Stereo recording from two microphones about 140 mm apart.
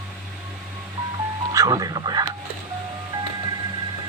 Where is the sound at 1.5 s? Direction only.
25° right (ahead or behind).